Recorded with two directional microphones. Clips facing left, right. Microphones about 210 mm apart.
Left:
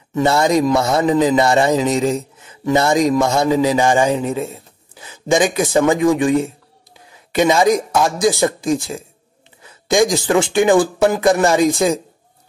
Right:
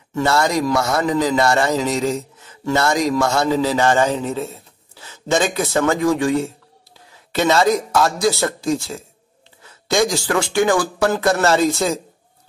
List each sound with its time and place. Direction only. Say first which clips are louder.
0.1 s speech: left 3 dB; 20° left (ahead or behind)